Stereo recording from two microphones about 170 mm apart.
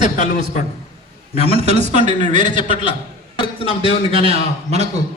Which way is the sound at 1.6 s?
40° right (ahead or behind).